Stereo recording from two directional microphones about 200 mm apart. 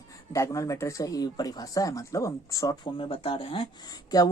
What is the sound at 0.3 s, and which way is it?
Speech, 15° left (ahead or behind).